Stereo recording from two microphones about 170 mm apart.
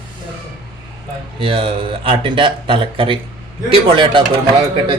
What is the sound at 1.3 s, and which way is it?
A man's voice, 30° right (ahead or behind).